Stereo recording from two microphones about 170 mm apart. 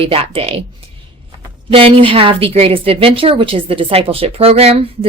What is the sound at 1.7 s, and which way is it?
A woman's voice, 30° right (ahead or behind).